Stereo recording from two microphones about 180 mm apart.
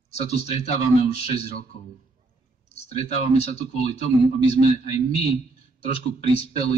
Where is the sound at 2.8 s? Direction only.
35° left (ahead or behind).